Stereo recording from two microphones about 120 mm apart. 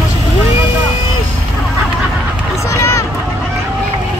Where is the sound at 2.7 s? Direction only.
25° left (ahead or behind).